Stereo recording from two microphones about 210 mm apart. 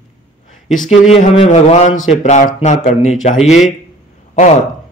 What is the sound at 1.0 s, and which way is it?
A man's voice, 30° left (ahead or behind).